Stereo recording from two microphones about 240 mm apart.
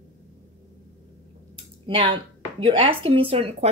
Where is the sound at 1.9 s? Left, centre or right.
Right.